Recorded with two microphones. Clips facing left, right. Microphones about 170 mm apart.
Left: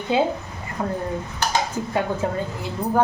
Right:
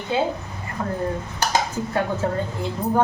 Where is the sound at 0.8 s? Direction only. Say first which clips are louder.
Left 1 dB; 20° left (ahead or behind).